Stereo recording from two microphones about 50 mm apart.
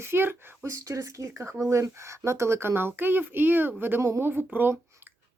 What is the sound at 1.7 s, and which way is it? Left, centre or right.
Speech, right.